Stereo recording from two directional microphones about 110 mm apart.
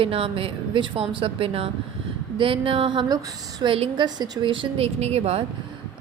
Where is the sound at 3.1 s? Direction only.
35° right (ahead or behind).